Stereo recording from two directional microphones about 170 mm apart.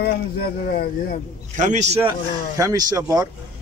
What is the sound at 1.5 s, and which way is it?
Speech, 45° right (ahead or behind).